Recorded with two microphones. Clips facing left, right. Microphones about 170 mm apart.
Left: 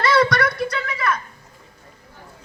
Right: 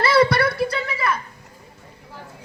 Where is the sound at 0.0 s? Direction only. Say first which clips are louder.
Right 1 dB; 30° right (ahead or behind).